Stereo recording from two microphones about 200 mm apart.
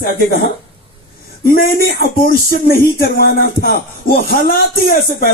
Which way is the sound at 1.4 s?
50° left (ahead or behind).